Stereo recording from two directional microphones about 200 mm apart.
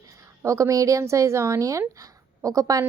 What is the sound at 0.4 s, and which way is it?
A woman's voice, 15° right (ahead or behind).